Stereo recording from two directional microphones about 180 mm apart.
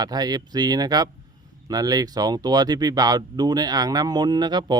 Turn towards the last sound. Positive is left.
turn(degrees=-25)  # may be behind; listen again after turning